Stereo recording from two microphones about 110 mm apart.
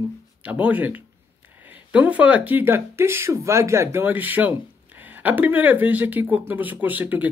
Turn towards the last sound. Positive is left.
turn(degrees=-15)  # may be behind; listen again after turning